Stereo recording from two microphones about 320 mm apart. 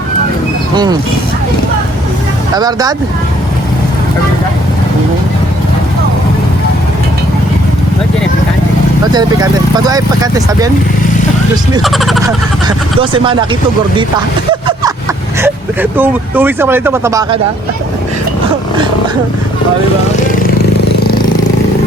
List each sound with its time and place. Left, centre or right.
2.6 s speech: centre
9.1 s speech: centre
11.8 s speech: centre
12.6 s speech: centre
15.4 s speech: centre